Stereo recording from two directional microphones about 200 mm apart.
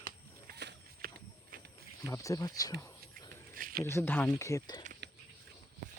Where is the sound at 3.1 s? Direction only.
45° right (ahead or behind).